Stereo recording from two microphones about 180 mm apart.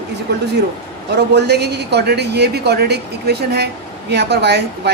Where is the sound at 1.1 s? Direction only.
65° right (ahead or behind).